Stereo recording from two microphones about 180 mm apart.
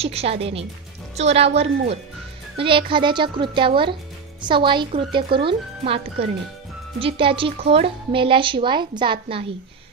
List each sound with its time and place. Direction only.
0.0 s a woman's voice: 35° right (ahead or behind)